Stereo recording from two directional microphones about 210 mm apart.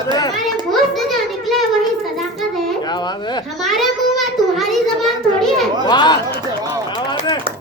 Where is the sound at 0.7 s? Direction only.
Centre (ahead or behind).